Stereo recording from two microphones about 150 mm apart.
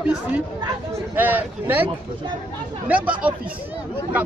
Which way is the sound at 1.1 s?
10° right (ahead or behind).